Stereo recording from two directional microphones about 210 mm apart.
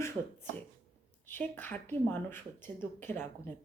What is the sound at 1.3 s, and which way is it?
Speech, 10° left (ahead or behind).